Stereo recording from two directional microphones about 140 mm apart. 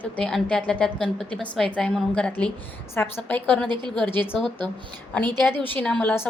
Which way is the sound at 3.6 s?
35° right (ahead or behind).